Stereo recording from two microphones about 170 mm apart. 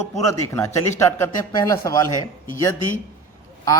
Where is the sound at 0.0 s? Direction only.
15° left (ahead or behind).